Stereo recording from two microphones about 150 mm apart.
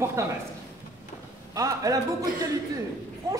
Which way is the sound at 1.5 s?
20° right (ahead or behind).